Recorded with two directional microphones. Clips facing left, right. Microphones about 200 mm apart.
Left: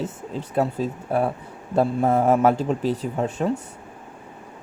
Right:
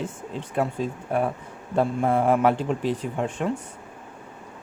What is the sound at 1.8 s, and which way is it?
A man's voice, 40° left (ahead or behind).